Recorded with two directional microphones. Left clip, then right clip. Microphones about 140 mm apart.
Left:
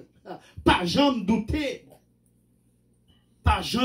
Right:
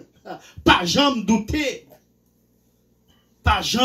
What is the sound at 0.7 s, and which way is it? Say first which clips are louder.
Speech: right 5 dB; 30° right (ahead or behind).